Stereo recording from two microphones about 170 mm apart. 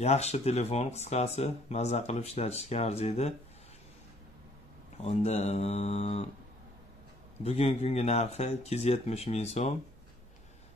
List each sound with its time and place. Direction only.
0.0 s speech: 40° left (ahead or behind)
5.0 s speech: 40° left (ahead or behind)
7.4 s speech: 35° left (ahead or behind)